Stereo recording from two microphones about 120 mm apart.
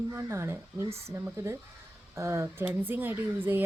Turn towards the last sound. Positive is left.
turn(degrees=-15)  # may be behind; listen again after turning